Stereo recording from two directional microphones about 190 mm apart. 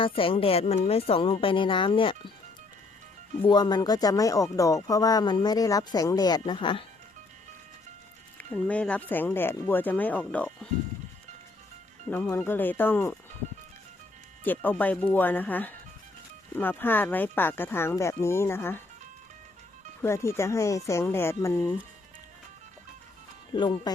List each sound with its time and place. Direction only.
0.0 s speech: 30° left (ahead or behind)
3.4 s speech: 20° left (ahead or behind)
8.4 s speech: 5° left (ahead or behind)
12.0 s speech: 5° left (ahead or behind)
14.4 s speech: 10° left (ahead or behind)
20.0 s speech: 15° left (ahead or behind)
23.6 s speech: 25° left (ahead or behind)